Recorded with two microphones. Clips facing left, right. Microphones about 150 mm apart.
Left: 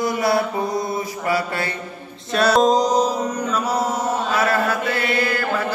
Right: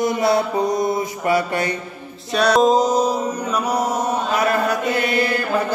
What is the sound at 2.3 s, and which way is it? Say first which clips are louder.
Music: right 1 dB; centre (ahead or behind).